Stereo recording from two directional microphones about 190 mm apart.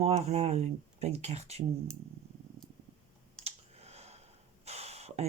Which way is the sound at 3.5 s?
35° right (ahead or behind).